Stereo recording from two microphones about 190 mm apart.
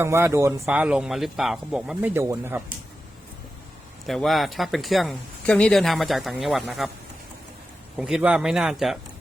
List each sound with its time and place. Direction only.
0.0 s speech: 15° right (ahead or behind)
4.0 s speech: centre (ahead or behind)
7.9 s speech: 5° right (ahead or behind)